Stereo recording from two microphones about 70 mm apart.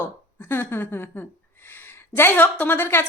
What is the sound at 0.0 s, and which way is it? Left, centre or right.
A woman's voice, left.